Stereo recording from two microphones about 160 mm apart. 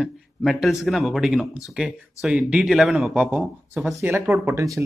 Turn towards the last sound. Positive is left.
turn(degrees=-20)  # may be behind; listen again after turning